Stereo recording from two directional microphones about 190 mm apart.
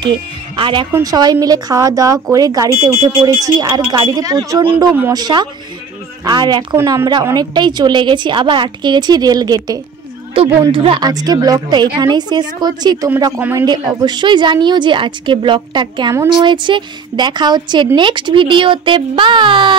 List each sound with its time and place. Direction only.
0.0 s a woman's voice: 25° right (ahead or behind)
13.7 s a woman's voice: 20° right (ahead or behind)